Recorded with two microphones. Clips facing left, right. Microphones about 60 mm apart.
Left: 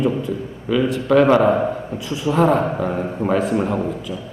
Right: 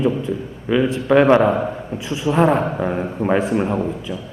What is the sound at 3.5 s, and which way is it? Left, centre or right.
Speech, right.